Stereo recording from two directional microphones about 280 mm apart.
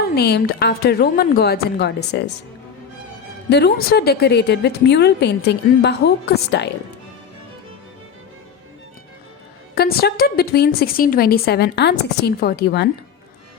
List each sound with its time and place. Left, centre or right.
0.2 s a woman's voice: left
3.5 s a woman's voice: left
9.7 s a woman's voice: left